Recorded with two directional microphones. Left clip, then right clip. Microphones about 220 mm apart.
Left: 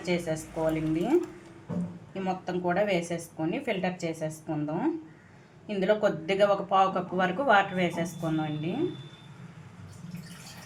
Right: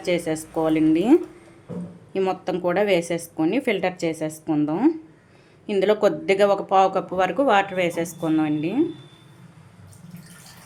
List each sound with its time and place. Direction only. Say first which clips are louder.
0.0 s speech: right 7 dB; 50° right (ahead or behind)
2.1 s speech: right 8 dB; 50° right (ahead or behind)